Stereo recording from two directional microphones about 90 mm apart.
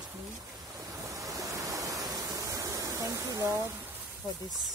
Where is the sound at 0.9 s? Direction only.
35° right (ahead or behind).